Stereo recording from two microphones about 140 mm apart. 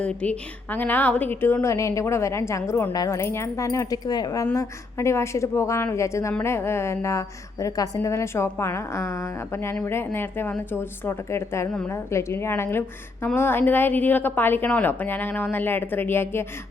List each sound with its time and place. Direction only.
0.0 s a woman's voice: 10° left (ahead or behind)